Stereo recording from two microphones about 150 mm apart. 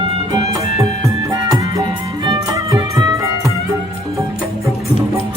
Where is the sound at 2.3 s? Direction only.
20° right (ahead or behind).